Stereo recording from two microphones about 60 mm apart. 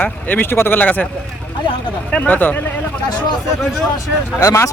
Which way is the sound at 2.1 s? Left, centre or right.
Left.